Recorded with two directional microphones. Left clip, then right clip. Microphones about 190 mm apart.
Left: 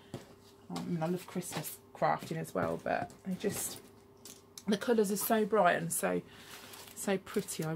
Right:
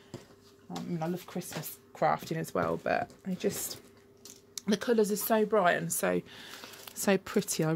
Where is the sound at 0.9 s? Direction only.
45° right (ahead or behind).